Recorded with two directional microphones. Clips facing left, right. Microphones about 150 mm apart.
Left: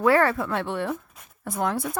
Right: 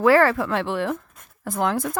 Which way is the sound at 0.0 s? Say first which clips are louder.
Right 3 dB; 90° right.